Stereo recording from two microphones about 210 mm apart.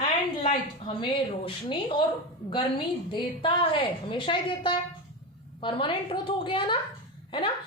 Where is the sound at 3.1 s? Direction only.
25° left (ahead or behind).